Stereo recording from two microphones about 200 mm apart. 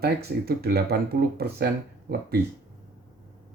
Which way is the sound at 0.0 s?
50° right (ahead or behind).